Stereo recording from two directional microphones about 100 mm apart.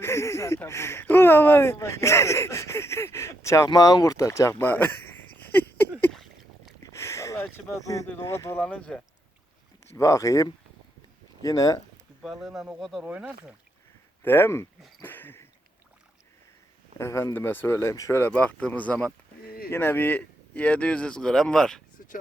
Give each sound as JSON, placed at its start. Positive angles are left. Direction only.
{"t": 0.0, "sound": "speech", "side_deg": 30}
{"t": 3.7, "sound": "speech", "side_deg": 40}
{"t": 5.5, "sound": "a sound", "side_deg": 20}
{"t": 6.1, "sound": "a sound", "side_deg": 5}
{"t": 6.8, "sound": "a sound", "side_deg": 30}
{"t": 7.5, "sound": "speech", "side_deg": 35}
{"t": 8.5, "sound": "speech", "side_deg": 10}
{"t": 9.9, "sound": "speech", "side_deg": 30}
{"t": 12.2, "sound": "speech", "side_deg": 0}
{"t": 14.2, "sound": "speech", "side_deg": 20}
{"t": 15.0, "sound": "a sound", "side_deg": 20}
{"t": 17.0, "sound": "speech", "side_deg": 30}
{"t": 19.7, "sound": "speech", "side_deg": 20}